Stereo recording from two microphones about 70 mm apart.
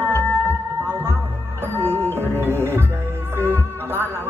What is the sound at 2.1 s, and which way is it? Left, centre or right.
Music, right.